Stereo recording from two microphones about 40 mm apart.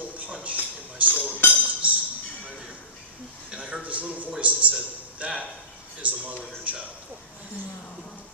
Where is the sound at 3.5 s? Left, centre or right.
Right.